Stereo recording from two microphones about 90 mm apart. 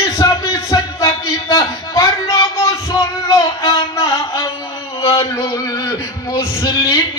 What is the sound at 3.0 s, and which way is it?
Child singing, 40° left (ahead or behind).